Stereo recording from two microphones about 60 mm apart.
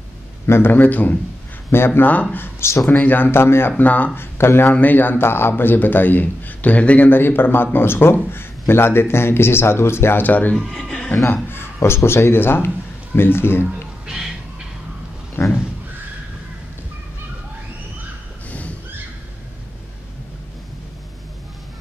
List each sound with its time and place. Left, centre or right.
0.5 s speech: left
2.3 s speech: left
3.3 s speech: left
3.8 s speech: left
4.2 s speech: left
4.7 s speech: left
7.1 s speech: left
10.2 s speech: left
10.5 s speech: centre
11.4 s a man's voice: left
14.0 s music: centre
15.4 s a sound: left